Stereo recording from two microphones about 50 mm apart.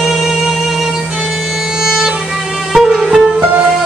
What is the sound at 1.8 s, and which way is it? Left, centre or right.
Music, centre.